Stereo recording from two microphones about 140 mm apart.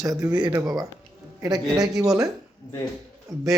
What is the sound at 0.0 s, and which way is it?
Speech, 25° right (ahead or behind).